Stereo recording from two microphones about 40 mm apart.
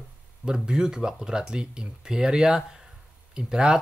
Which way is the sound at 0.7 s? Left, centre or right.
Centre.